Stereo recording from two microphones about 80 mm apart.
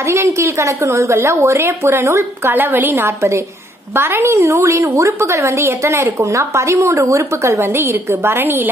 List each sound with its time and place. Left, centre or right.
0.1 s a woman's voice: right
2.5 s a woman's voice: right